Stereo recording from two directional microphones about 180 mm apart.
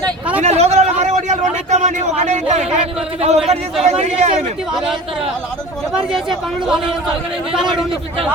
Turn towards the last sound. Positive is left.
turn(degrees=-5)  # may be behind; listen again after turning